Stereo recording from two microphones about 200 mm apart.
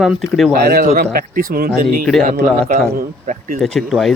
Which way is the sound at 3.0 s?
40° right (ahead or behind).